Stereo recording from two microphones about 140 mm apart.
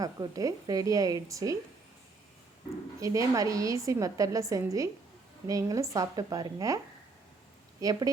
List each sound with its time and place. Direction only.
0.0 s a woman's voice: 25° right (ahead or behind)
3.0 s a woman's voice: 25° right (ahead or behind)
7.8 s a woman's voice: 25° right (ahead or behind)